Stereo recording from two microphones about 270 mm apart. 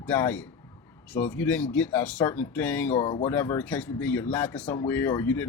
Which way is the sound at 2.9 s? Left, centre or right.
Centre.